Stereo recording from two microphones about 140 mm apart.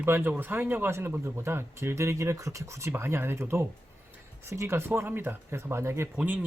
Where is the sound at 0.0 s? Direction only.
15° right (ahead or behind).